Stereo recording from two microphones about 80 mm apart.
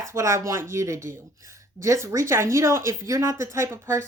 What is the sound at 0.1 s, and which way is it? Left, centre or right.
Speech, right.